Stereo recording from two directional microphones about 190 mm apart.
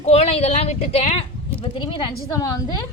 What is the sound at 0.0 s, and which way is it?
A woman's voice, 35° left (ahead or behind).